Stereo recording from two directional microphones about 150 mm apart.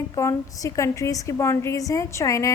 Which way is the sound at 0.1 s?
20° left (ahead or behind).